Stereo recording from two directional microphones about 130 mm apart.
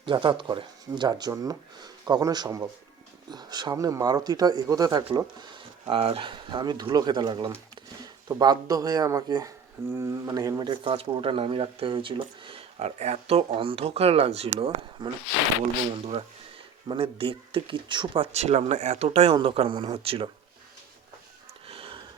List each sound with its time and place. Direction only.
0.0 s speech: 40° right (ahead or behind)
5.9 s speech: 45° right (ahead or behind)
16.9 s speech: 45° right (ahead or behind)
18.3 s speech: 55° right (ahead or behind)
21.7 s sniff: 45° right (ahead or behind)